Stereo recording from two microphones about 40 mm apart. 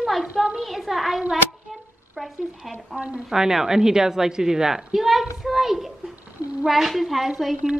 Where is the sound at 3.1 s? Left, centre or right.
Centre.